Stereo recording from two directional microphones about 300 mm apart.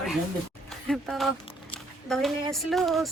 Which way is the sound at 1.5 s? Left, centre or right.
Centre.